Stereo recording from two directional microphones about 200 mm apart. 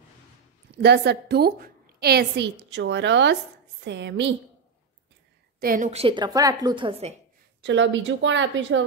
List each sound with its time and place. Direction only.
0.8 s a woman's voice: 55° right (ahead or behind)
5.6 s a woman's voice: 45° right (ahead or behind)
5.9 s a woman's voice: 30° right (ahead or behind)
7.6 s a woman's voice: 65° right (ahead or behind)